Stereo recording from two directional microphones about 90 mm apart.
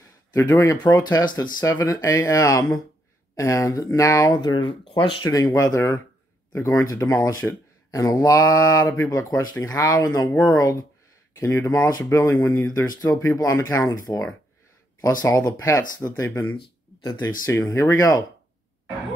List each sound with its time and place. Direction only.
0.5 s speech: 35° left (ahead or behind)
0.7 s speech: 50° left (ahead or behind)
1.7 s speech: 40° left (ahead or behind)
4.3 s speech: 55° left (ahead or behind)
4.9 s speech: 75° left (ahead or behind)
5.3 s speech: 40° left (ahead or behind)
17.0 s speech: 50° left (ahead or behind)
17.6 s speech: 35° left (ahead or behind)